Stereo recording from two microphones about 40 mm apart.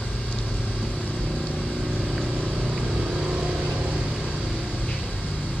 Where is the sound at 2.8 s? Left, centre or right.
Centre.